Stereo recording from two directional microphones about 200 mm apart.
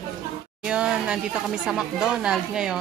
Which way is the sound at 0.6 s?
5° right (ahead or behind).